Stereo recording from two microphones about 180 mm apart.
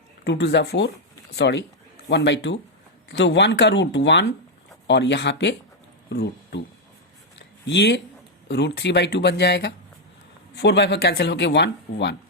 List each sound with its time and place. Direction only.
0.3 s speech: 70° left (ahead or behind)
7.3 s a sound: 70° left (ahead or behind)
8.4 s speech: 70° left (ahead or behind)